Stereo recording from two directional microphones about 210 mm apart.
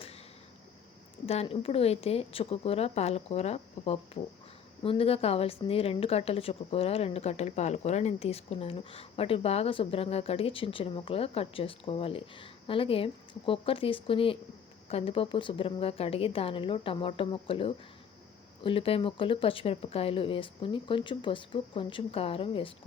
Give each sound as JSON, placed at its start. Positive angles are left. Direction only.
{"t": 1.3, "sound": "a woman's voice", "side_deg": 30}